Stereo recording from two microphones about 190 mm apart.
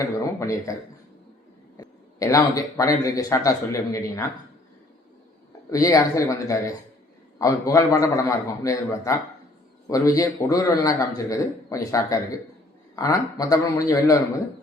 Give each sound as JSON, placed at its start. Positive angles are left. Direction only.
{"t": 0.0, "sound": "a man's voice", "side_deg": 15}
{"t": 1.8, "sound": "a man's voice", "side_deg": 15}
{"t": 5.7, "sound": "a man's voice", "side_deg": 15}